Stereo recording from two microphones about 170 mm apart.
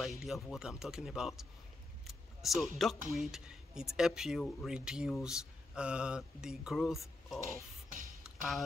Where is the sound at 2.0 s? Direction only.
Centre (ahead or behind).